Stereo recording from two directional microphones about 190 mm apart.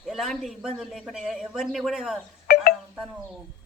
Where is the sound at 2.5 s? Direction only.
55° left (ahead or behind).